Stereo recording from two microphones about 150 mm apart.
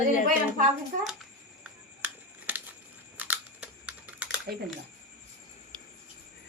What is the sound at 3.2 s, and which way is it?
Computer keyboard, 10° right (ahead or behind).